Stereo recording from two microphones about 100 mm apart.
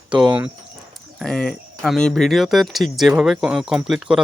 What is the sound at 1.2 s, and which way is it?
Speech, 5° left (ahead or behind).